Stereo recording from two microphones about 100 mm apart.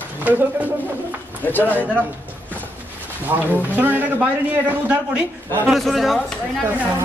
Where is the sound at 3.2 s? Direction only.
20° right (ahead or behind).